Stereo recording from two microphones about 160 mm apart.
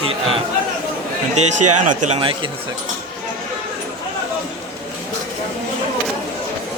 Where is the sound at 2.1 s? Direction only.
35° right (ahead or behind).